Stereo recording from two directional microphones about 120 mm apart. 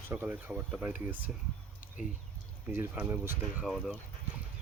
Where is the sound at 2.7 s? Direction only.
15° right (ahead or behind).